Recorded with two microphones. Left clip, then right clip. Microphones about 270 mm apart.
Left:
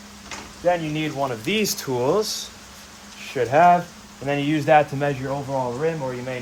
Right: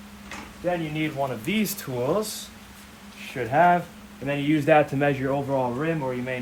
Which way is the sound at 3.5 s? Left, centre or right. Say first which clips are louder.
Left 4 dB; left.